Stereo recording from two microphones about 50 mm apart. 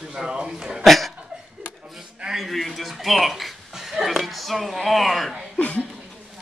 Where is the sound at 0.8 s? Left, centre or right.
Centre.